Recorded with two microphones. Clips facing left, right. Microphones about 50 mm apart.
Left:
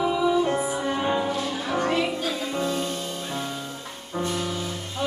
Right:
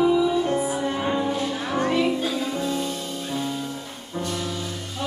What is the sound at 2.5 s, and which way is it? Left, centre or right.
Music, left.